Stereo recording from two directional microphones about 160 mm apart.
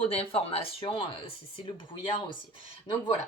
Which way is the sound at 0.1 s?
35° left (ahead or behind).